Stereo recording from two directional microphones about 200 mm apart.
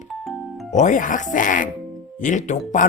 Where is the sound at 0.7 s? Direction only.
40° left (ahead or behind).